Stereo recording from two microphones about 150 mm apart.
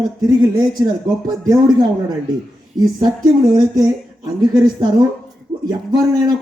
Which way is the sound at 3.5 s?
25° right (ahead or behind).